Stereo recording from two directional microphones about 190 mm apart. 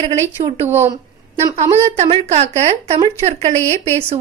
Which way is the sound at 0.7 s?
10° right (ahead or behind).